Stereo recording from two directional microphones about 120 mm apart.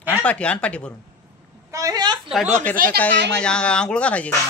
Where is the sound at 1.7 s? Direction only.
30° right (ahead or behind).